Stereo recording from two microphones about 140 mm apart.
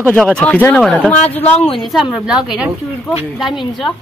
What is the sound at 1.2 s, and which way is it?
Speech, 45° left (ahead or behind).